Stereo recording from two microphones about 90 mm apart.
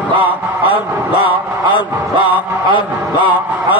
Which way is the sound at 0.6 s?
80° left.